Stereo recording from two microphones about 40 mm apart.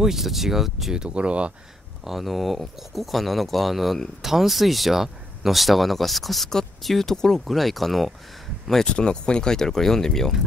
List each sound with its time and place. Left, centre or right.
0.0 s speech: centre
0.9 s speech: right
2.0 s speech: centre
8.8 s speech: left